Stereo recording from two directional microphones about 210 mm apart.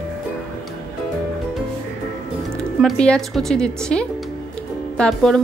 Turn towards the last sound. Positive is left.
turn(degrees=5)  # may be behind; listen again after turning